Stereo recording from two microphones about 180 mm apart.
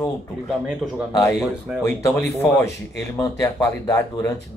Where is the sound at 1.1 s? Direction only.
20° left (ahead or behind).